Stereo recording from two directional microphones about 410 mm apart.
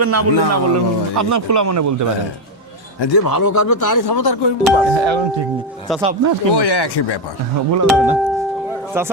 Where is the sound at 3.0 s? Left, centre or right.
Left.